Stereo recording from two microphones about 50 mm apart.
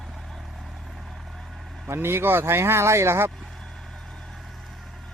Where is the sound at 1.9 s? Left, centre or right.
Right.